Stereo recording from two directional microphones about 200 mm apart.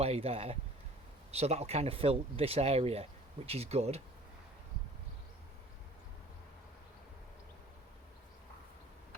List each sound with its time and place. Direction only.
0.0 s speech: 30° right (ahead or behind)